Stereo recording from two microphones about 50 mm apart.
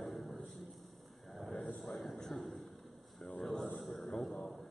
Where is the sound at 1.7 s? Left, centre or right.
Centre.